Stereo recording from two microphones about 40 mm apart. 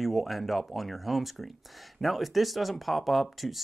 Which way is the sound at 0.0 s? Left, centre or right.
Centre.